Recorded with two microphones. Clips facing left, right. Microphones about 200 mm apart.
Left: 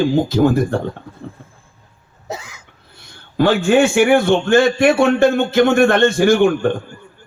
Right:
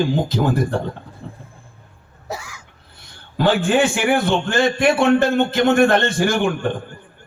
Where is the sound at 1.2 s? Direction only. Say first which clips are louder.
Left 3 dB; 55° left (ahead or behind).